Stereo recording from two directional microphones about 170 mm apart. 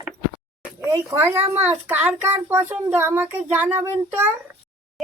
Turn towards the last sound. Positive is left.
turn(degrees=-10)  # may be behind; listen again after turning